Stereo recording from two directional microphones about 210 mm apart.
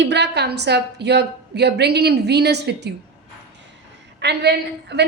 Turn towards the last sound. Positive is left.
turn(degrees=-50)  # may be behind; listen again after turning